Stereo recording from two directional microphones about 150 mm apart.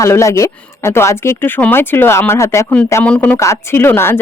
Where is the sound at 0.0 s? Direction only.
20° left (ahead or behind).